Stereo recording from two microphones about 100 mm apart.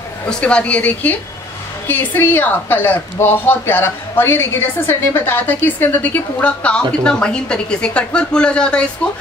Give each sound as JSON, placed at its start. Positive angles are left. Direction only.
{"t": 0.3, "sound": "a woman's voice", "side_deg": 10}